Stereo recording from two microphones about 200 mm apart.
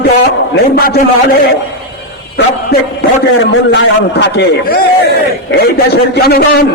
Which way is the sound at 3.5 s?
65° left (ahead or behind).